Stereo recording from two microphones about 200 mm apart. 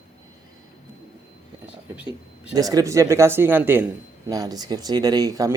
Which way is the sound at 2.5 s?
20° right (ahead or behind).